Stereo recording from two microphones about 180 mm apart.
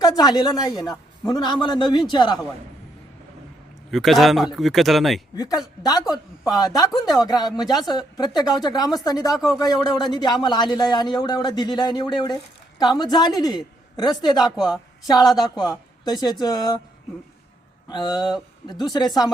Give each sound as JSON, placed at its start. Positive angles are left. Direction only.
{"t": 0.0, "sound": "speech", "side_deg": 20}
{"t": 3.9, "sound": "speech", "side_deg": 0}
{"t": 5.8, "sound": "speech", "side_deg": 20}
{"t": 9.3, "sound": "speech", "side_deg": 0}
{"t": 9.6, "sound": "a woman's voice", "side_deg": 20}
{"t": 14.5, "sound": "speech", "side_deg": 0}
{"t": 15.0, "sound": "speech", "side_deg": 20}
{"t": 17.8, "sound": "speech", "side_deg": 25}